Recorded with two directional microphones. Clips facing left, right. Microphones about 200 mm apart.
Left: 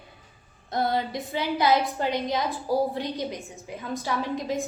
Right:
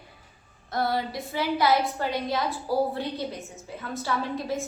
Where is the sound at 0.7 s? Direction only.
20° left (ahead or behind).